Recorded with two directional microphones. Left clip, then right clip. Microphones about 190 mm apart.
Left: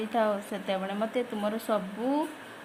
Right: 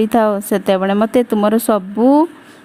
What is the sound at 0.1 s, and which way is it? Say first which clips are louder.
A woman's voice: right 14 dB; 55° right (ahead or behind).